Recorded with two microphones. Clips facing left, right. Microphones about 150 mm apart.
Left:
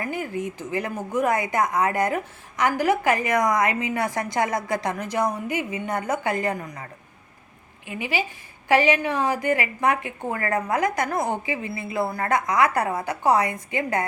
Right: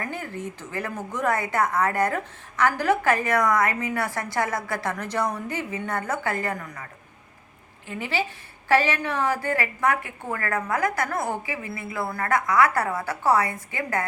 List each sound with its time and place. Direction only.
0.0 s speech: 15° left (ahead or behind)
7.9 s a woman's voice: 15° left (ahead or behind)